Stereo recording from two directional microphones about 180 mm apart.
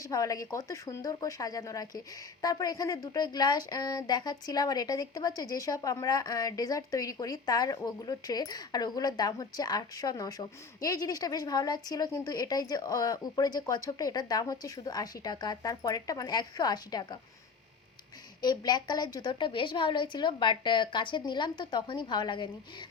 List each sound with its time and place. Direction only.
0.0 s speech: 20° left (ahead or behind)
18.4 s speech: 25° left (ahead or behind)